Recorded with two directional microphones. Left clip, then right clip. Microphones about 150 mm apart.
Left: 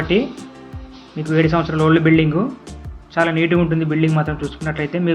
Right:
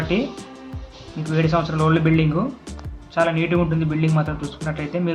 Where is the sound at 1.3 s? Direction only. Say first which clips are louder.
Left 4 dB; 15° left (ahead or behind).